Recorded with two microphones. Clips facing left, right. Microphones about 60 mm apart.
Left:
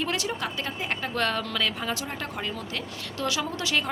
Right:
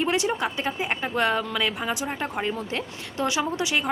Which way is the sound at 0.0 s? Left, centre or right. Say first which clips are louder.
Right 5 dB; right.